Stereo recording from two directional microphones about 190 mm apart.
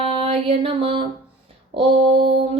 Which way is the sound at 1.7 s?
30° right (ahead or behind).